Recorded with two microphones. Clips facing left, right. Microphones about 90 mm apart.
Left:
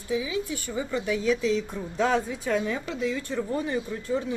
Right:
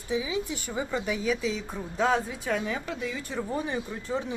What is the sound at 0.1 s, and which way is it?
A woman's voice, 20° right (ahead or behind).